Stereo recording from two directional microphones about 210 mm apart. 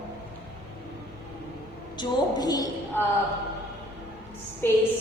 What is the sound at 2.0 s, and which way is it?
A woman's voice, 20° left (ahead or behind).